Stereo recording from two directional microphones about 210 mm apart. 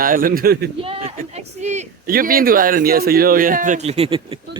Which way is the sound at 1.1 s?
35° right (ahead or behind).